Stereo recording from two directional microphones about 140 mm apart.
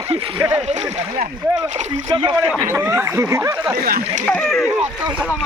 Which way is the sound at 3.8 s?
75° right (ahead or behind).